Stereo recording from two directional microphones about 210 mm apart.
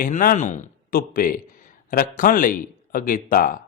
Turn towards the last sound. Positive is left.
turn(degrees=40)  # may be behind; listen again after turning